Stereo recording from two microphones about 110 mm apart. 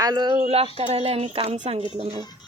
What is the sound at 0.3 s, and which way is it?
A woman's voice, 65° right (ahead or behind).